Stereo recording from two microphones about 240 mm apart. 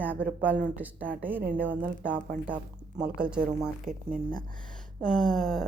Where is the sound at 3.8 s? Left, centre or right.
Right.